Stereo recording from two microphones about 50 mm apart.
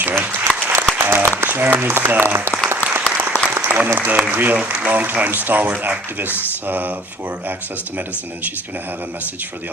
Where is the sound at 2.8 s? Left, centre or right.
Left.